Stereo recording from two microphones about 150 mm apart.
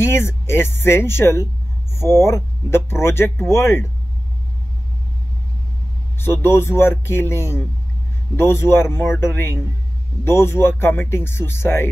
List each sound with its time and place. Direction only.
0.0 s speech: 15° left (ahead or behind)
6.1 s speech: 15° left (ahead or behind)